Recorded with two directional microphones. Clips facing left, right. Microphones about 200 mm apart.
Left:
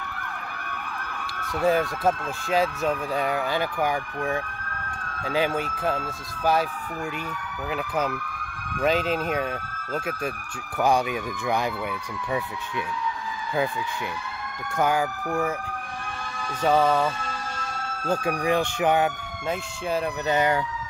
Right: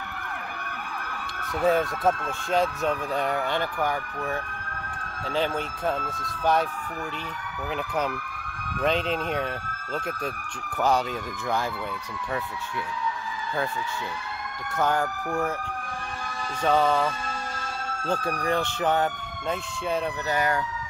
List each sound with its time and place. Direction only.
1.5 s speech: centre (ahead or behind)
7.7 s speech: 5° left (ahead or behind)
14.8 s speech: 10° left (ahead or behind)
16.6 s speech: 5° left (ahead or behind)
20.2 s speech: 20° left (ahead or behind)